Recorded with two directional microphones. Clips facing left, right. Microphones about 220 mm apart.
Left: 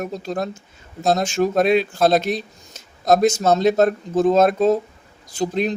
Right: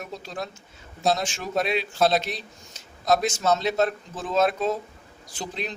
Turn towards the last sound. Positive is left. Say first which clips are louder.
# left 12 dB
turn(degrees=45)  # may be behind; listen again after turning